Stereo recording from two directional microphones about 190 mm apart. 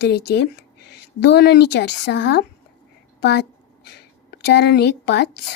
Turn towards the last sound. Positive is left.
turn(degrees=65)  # may be behind; listen again after turning